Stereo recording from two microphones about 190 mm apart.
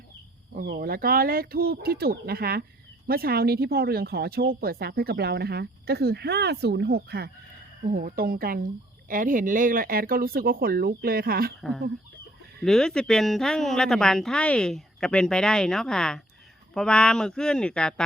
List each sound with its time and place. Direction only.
0.5 s speech: 50° right (ahead or behind)
12.6 s a woman's voice: 5° left (ahead or behind)